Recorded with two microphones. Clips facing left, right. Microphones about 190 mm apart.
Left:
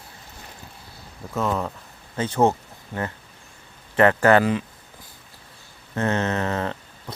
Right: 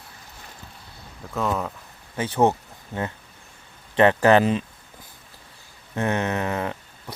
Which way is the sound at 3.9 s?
20° right (ahead or behind).